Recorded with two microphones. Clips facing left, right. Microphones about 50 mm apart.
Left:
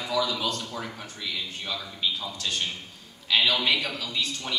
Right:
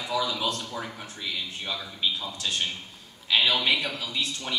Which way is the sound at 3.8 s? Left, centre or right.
Right.